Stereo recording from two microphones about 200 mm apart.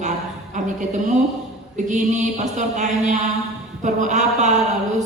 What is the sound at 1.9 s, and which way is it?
Speech, 35° right (ahead or behind).